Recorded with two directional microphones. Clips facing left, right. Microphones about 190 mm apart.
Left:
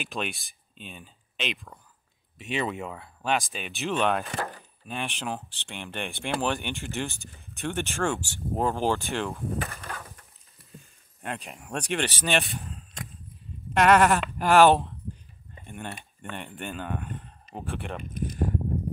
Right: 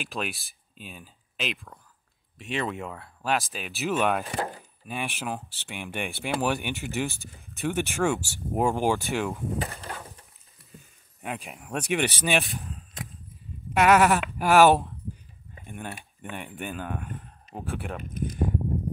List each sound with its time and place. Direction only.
0.0 s speech: centre (ahead or behind)
9.6 s a sound: 30° right (ahead or behind)
10.7 s speech: 5° right (ahead or behind)
12.4 s speech: centre (ahead or behind)